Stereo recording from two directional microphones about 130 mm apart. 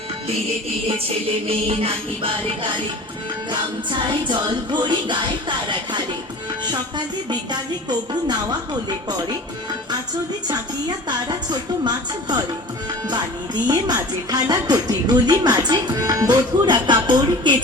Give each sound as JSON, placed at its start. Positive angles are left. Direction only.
{"t": 1.5, "sound": "music", "side_deg": -45}
{"t": 3.5, "sound": "speech", "side_deg": -35}
{"t": 10.5, "sound": "speech", "side_deg": -30}